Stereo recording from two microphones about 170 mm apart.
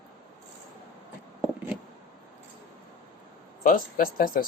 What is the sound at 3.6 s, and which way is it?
Speech, 55° left (ahead or behind).